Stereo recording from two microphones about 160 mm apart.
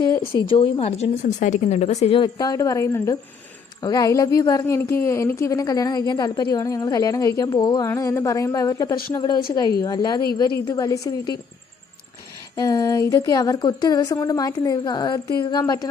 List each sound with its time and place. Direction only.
0.3 s speech: 30° left (ahead or behind)
12.5 s speech: 20° left (ahead or behind)